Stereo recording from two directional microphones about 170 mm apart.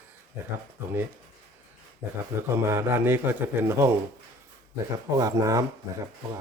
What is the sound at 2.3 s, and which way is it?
Speech, 15° right (ahead or behind).